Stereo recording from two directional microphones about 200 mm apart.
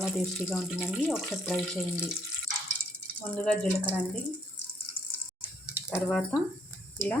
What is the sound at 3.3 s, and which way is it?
Speech, 5° left (ahead or behind).